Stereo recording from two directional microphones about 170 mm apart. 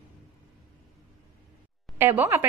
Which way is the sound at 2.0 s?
10° right (ahead or behind).